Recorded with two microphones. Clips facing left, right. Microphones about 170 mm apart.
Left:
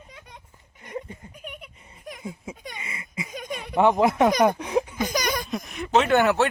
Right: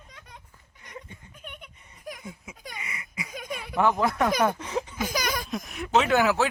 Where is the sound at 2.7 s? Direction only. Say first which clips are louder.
Left 3 dB; 25° left (ahead or behind).